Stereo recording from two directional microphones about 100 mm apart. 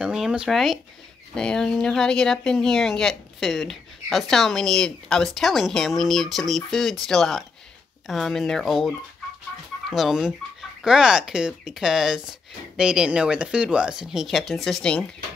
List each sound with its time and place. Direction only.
0.0 s speech: 5° right (ahead or behind)